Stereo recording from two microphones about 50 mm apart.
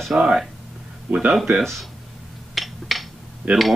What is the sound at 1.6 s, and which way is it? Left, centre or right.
Speech, centre.